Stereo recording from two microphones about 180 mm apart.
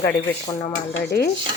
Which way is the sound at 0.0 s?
20° left (ahead or behind).